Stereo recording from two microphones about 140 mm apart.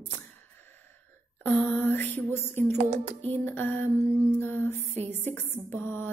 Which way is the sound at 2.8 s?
55° right (ahead or behind).